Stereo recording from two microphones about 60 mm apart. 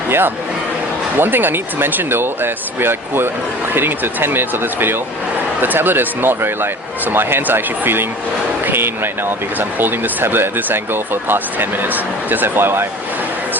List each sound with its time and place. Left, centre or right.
0.1 s a man's voice: right